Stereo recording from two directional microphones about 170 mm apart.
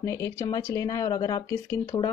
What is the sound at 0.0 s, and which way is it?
Speech, 20° left (ahead or behind).